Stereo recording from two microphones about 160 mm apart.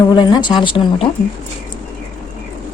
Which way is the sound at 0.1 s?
25° left (ahead or behind).